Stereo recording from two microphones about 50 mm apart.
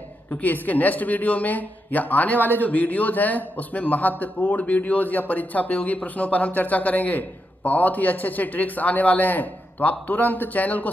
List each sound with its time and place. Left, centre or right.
0.3 s speech: left